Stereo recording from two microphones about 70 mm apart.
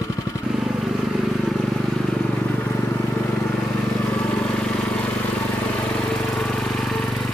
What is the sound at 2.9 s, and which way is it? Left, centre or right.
Vehicle, left.